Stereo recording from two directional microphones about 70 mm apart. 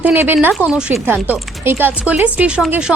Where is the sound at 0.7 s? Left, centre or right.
Centre.